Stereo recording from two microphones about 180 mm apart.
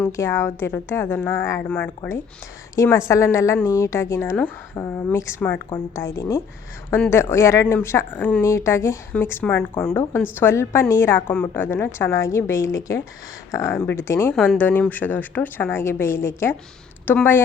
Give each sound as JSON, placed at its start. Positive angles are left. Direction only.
{"t": 0.0, "sound": "a woman's voice", "side_deg": 15}